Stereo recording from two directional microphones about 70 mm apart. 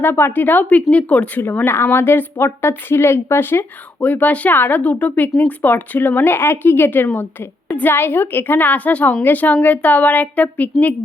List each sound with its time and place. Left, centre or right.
0.0 s a woman's voice: left; by 1.3 s centre
1.4 s a woman's voice: left
4.0 s a woman's voice: left